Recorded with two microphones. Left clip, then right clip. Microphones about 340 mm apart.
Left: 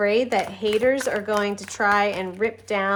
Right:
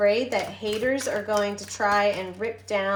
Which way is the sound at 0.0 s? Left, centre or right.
Left.